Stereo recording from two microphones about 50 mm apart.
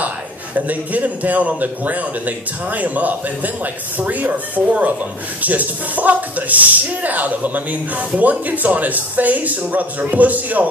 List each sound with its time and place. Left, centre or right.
0.6 s speech: right